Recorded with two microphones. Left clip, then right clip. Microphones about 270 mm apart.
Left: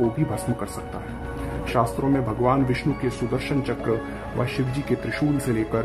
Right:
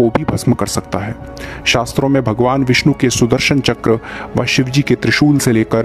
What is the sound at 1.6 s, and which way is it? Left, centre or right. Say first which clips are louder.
Speech: right 9 dB; right.